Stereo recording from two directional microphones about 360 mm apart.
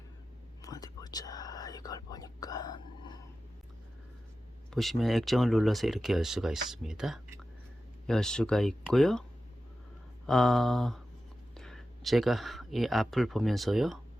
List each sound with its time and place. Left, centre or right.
0.6 s speech: centre
4.7 s speech: centre
10.2 s speech: centre